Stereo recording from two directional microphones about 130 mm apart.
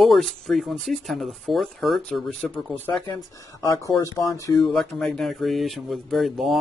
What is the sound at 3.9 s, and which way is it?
Speech, 25° left (ahead or behind).